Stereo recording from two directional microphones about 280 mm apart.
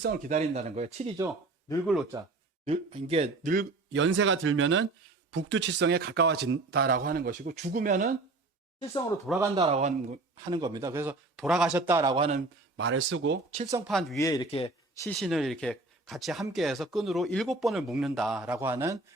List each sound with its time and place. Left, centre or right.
0.0 s speech: right
9.4 s speech: centre
12.7 s speech: right
13.5 s speech: right
13.7 s speech: centre
14.3 s a man's voice: centre
15.0 s speech: centre